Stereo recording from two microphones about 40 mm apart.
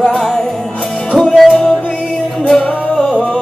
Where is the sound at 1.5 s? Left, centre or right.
Centre.